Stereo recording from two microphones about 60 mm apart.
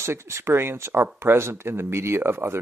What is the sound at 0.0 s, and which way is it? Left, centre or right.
Speech, right.